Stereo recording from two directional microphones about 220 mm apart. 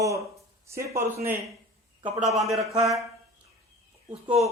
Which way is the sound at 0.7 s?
15° right (ahead or behind).